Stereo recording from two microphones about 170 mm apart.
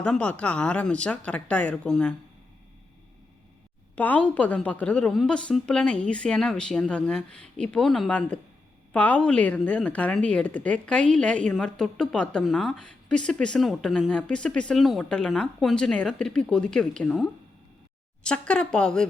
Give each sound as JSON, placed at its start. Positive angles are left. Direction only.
{"t": 0.0, "sound": "speech", "side_deg": 5}
{"t": 3.9, "sound": "speech", "side_deg": 10}